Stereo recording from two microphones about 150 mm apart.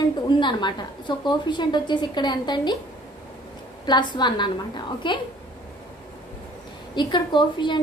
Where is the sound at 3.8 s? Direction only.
30° left (ahead or behind).